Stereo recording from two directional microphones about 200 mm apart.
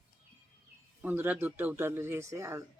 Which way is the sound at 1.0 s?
10° right (ahead or behind).